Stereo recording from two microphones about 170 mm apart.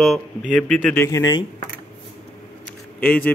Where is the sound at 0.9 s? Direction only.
15° left (ahead or behind).